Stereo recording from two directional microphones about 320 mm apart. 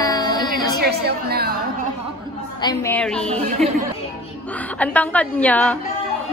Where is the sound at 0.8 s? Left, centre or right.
Right.